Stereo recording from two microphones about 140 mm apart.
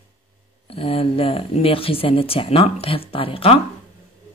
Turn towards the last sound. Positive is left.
turn(degrees=40)  # may be behind; listen again after turning